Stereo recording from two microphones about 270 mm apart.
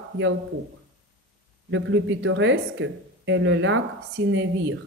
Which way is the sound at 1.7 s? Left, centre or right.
Right.